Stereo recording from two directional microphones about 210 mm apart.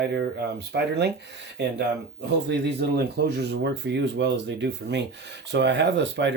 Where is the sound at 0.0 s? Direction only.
50° right (ahead or behind).